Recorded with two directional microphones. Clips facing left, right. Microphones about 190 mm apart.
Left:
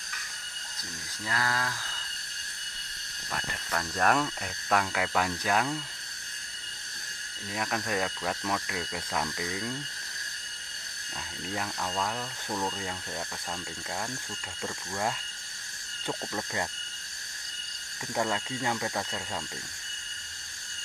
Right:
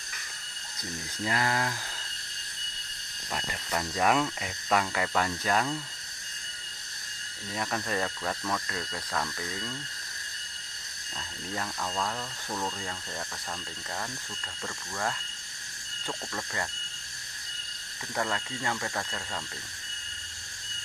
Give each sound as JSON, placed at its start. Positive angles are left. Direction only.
{"t": 1.2, "sound": "speech", "side_deg": -20}
{"t": 3.3, "sound": "speech", "side_deg": -10}
{"t": 7.5, "sound": "speech", "side_deg": 5}
{"t": 11.1, "sound": "speech", "side_deg": 10}
{"t": 14.6, "sound": "speech", "side_deg": 15}
{"t": 18.1, "sound": "speech", "side_deg": 15}